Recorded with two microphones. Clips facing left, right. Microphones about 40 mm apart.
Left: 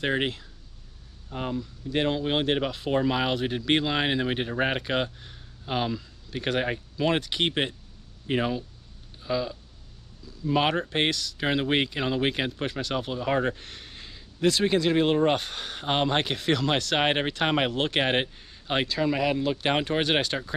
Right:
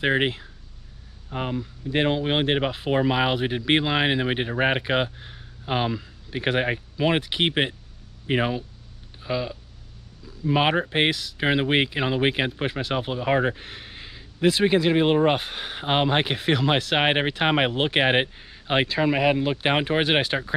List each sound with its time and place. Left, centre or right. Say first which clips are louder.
0.0 s speech: right 4 dB; right